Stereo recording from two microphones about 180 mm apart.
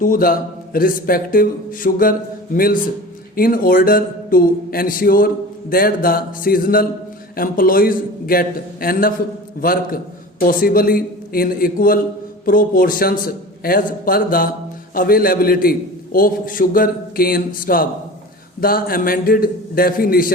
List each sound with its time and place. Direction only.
0.0 s speech: 50° left (ahead or behind)
3.3 s a man's voice: 55° left (ahead or behind)